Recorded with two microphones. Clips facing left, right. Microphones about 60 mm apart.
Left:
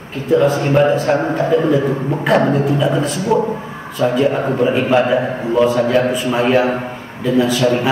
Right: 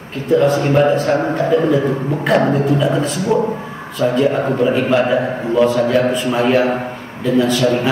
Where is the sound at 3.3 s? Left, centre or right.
Centre.